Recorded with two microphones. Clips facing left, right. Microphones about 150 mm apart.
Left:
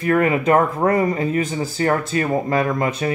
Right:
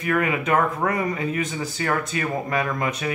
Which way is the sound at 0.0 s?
35° left (ahead or behind).